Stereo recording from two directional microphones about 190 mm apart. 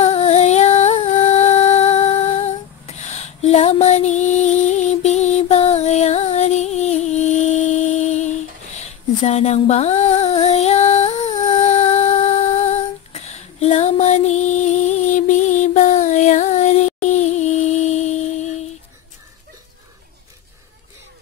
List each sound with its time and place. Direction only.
0.0 s music: 35° left (ahead or behind)